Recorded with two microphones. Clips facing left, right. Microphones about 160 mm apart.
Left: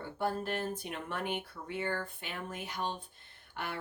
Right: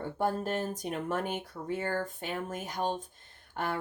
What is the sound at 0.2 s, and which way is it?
Speech, 45° right (ahead or behind).